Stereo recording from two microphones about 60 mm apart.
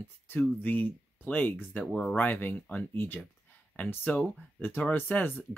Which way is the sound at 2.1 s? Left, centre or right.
Left.